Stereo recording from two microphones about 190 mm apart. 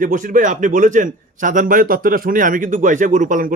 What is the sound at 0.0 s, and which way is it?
A man's voice, 45° right (ahead or behind).